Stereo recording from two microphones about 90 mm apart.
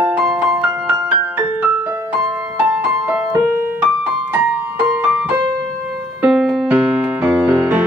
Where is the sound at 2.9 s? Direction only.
25° right (ahead or behind).